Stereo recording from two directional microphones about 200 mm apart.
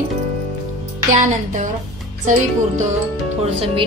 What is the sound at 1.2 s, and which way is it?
Speech, 40° right (ahead or behind).